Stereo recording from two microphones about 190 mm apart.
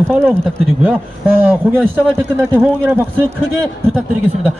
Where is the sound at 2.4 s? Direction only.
10° right (ahead or behind).